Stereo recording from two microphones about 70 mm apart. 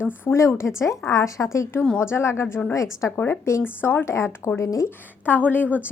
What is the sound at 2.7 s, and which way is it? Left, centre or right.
Speech, left.